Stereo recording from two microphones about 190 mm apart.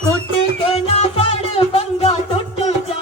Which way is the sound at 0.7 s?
30° left (ahead or behind).